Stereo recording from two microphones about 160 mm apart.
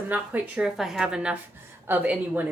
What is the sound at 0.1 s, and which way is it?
A woman's voice, 10° right (ahead or behind).